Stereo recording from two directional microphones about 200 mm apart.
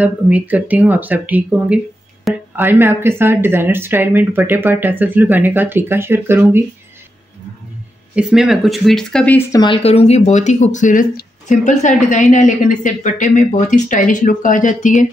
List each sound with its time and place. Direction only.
0.0 s speech: 5° right (ahead or behind)
8.1 s speech: 5° right (ahead or behind)
9.6 s speech: 25° left (ahead or behind)